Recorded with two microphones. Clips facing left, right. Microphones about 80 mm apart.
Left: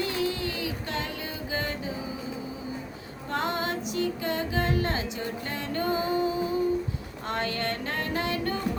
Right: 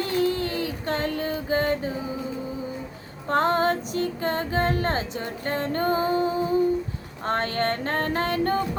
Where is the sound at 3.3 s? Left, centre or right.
Right.